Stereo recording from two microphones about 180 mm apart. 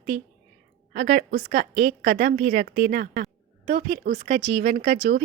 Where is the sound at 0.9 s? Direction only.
60° right (ahead or behind).